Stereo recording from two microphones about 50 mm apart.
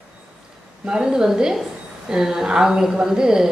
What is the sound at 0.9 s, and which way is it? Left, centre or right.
A woman's voice, centre.